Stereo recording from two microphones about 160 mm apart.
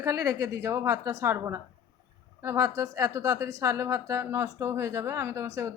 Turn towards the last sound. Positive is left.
turn(degrees=-20)  # may be behind; listen again after turning